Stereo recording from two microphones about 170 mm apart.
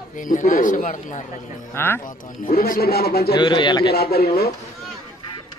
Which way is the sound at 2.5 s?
60° left (ahead or behind).